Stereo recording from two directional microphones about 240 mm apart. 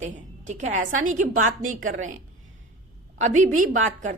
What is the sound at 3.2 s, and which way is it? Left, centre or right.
Speech, right.